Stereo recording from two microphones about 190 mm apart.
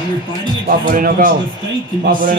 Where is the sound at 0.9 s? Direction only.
50° right (ahead or behind).